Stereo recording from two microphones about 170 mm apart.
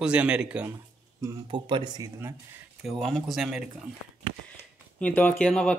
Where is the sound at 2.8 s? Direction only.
Centre (ahead or behind).